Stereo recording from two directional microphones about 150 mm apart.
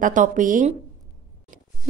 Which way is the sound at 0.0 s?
60° right (ahead or behind).